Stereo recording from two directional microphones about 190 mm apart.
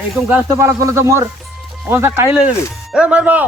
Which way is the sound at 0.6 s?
15° right (ahead or behind).